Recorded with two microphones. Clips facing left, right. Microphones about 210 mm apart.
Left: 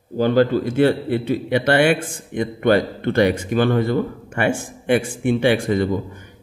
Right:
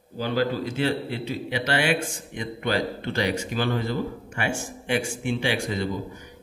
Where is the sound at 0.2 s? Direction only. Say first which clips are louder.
Left 9 dB; 50° left (ahead or behind).